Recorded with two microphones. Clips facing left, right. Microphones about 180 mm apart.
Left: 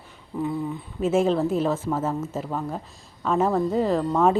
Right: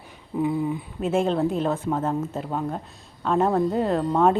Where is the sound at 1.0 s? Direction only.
5° left (ahead or behind).